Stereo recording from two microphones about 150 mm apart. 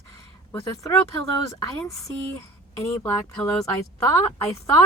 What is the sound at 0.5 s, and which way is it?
Speech, 20° left (ahead or behind).